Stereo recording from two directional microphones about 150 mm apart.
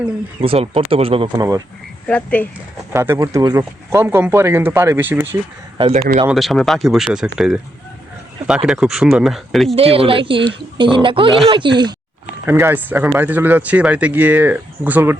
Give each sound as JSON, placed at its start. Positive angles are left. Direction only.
{"t": 0.4, "sound": "speech", "side_deg": -40}
{"t": 1.4, "sound": "speech", "side_deg": -20}
{"t": 2.0, "sound": "speech", "side_deg": 10}
{"t": 2.9, "sound": "speech", "side_deg": -15}
{"t": 6.2, "sound": "speech", "side_deg": 0}
{"t": 9.7, "sound": "speech", "side_deg": -40}
{"t": 12.5, "sound": "speech", "side_deg": -15}